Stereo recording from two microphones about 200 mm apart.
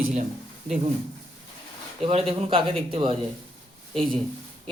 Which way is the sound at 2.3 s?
30° right (ahead or behind).